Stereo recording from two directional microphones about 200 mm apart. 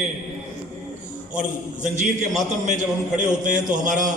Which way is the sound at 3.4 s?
40° right (ahead or behind).